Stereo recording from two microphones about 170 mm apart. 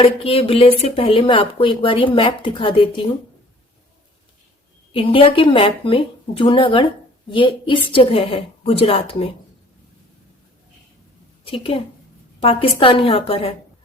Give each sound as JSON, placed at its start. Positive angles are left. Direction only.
{"t": 0.0, "sound": "speech", "side_deg": 35}
{"t": 4.9, "sound": "speech", "side_deg": 30}
{"t": 11.4, "sound": "speech", "side_deg": 30}